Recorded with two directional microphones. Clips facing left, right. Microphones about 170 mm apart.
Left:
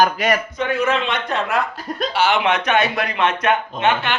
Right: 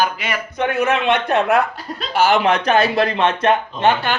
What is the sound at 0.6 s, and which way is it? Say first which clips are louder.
A man's voice: right 2 dB; 60° right (ahead or behind).